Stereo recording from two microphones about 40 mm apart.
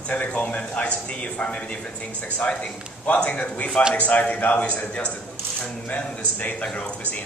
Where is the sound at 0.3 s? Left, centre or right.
Left.